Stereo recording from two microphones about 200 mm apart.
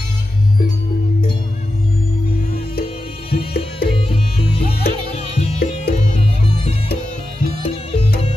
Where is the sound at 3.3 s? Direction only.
30° left (ahead or behind).